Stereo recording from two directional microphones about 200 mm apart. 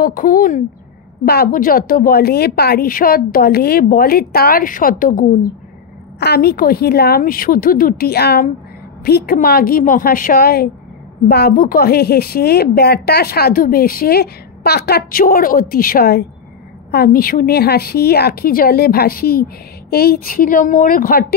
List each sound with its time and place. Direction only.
0.0 s a woman's voice: 45° left (ahead or behind)
6.1 s a woman's voice: 55° left (ahead or behind)